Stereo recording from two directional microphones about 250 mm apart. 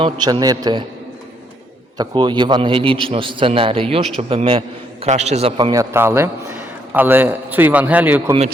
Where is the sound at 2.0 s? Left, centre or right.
Centre.